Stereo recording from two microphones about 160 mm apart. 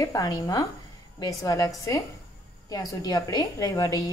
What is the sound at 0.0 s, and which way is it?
A woman's voice, 20° left (ahead or behind).